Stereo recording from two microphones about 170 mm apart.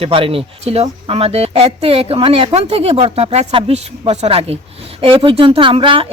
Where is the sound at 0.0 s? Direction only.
35° right (ahead or behind).